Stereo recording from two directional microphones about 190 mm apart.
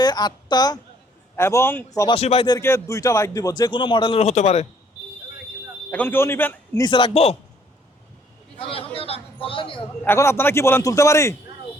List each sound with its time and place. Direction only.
0.0 s a woman's voice: 20° left (ahead or behind)
2.1 s speech: 30° left (ahead or behind)
2.6 s speech: 15° left (ahead or behind); by 4.6 s 35° left (ahead or behind)
5.9 s a man's voice: 10° left (ahead or behind)
6.8 s speech: 25° left (ahead or behind)
8.5 s a man's voice: 30° left (ahead or behind)
10.0 s a man's voice: 10° left (ahead or behind)